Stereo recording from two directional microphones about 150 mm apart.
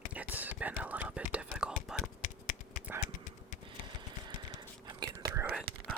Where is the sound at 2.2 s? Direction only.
60° left (ahead or behind).